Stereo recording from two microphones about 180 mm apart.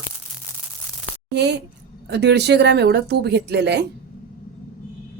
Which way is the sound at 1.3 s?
70° right (ahead or behind).